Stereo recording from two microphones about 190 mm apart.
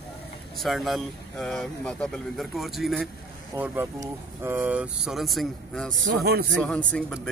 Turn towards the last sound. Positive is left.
turn(degrees=5)  # may be behind; listen again after turning